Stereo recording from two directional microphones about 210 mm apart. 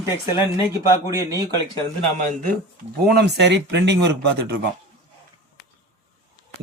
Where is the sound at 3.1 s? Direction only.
55° right (ahead or behind).